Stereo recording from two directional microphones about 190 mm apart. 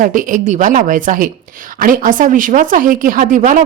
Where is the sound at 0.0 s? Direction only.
45° right (ahead or behind).